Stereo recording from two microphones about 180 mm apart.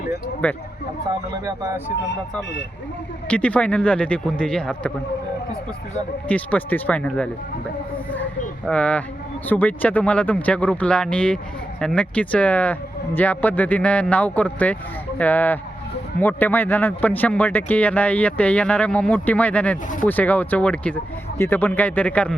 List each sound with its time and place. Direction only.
0.4 s speech: 10° left (ahead or behind)
1.5 s speech: 20° right (ahead or behind)
3.2 s speech: 5° left (ahead or behind)
6.2 s speech: 10° left (ahead or behind)
8.6 s speech: 5° left (ahead or behind)